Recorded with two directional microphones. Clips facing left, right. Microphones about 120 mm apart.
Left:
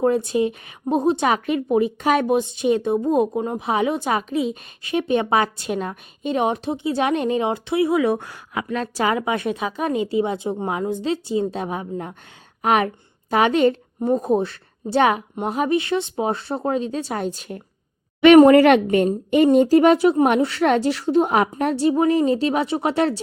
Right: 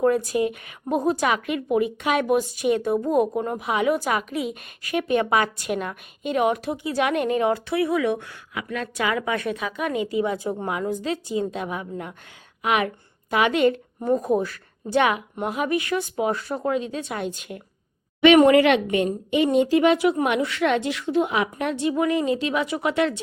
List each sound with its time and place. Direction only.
0.0 s a woman's voice: 25° left (ahead or behind)